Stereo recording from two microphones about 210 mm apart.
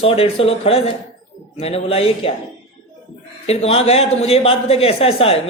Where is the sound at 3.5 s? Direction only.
30° left (ahead or behind).